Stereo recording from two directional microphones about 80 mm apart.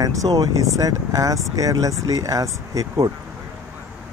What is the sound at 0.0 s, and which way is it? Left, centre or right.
Speech, right.